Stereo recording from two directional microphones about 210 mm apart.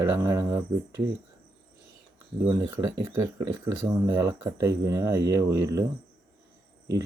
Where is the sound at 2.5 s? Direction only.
10° right (ahead or behind).